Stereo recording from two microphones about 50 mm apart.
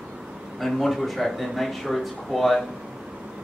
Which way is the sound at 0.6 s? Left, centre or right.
Centre.